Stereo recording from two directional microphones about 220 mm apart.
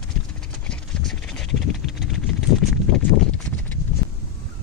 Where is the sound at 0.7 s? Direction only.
Centre (ahead or behind).